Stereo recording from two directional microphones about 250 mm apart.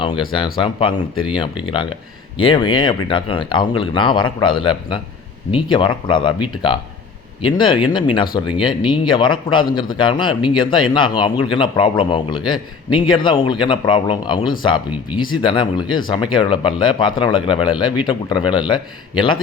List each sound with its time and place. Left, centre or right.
0.0 s a man's voice: centre